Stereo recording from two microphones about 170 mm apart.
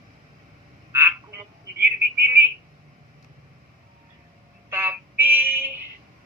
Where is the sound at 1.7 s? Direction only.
75° right (ahead or behind).